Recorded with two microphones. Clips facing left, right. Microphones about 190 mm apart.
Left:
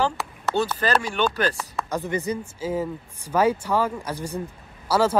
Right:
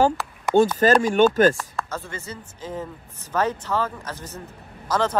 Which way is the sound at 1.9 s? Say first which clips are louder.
Left 8 dB; 15° left (ahead or behind).